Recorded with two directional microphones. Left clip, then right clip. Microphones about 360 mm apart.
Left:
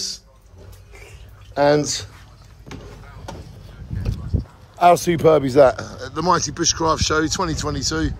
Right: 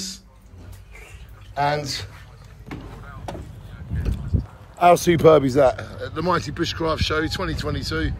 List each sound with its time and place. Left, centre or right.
1.5 s speech: centre
4.3 s a sound: centre
5.5 s speech: left
5.8 s speech: centre